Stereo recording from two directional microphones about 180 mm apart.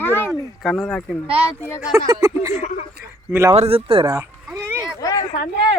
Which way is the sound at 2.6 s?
45° left (ahead or behind).